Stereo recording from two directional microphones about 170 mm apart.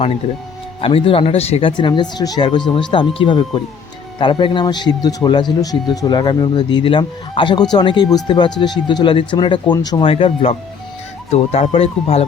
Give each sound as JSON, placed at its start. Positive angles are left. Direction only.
{"t": 0.8, "sound": "speech", "side_deg": 30}